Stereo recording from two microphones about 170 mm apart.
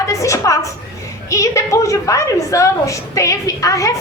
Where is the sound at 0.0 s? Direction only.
20° left (ahead or behind).